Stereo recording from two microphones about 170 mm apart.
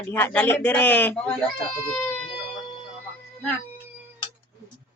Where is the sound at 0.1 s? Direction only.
10° left (ahead or behind).